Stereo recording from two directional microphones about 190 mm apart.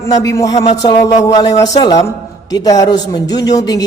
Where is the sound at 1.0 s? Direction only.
15° left (ahead or behind).